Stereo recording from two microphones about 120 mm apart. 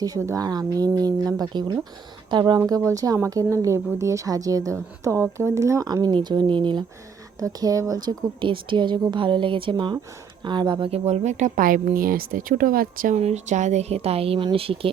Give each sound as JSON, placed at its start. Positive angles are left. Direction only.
{"t": 0.0, "sound": "speech", "side_deg": -25}
{"t": 2.6, "sound": "a woman's voice", "side_deg": -30}
{"t": 7.3, "sound": "speech", "side_deg": -30}
{"t": 10.9, "sound": "speech", "side_deg": -65}
{"t": 13.1, "sound": "speech", "side_deg": -70}